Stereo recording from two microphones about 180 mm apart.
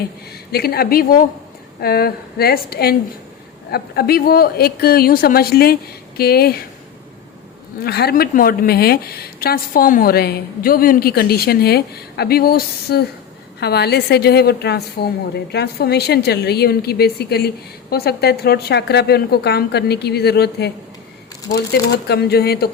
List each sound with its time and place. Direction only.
0.5 s a woman's voice: 60° left (ahead or behind)
7.9 s a woman's voice: 60° left (ahead or behind)